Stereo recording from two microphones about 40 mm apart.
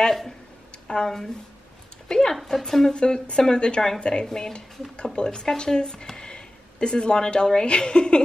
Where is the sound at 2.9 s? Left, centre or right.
Left.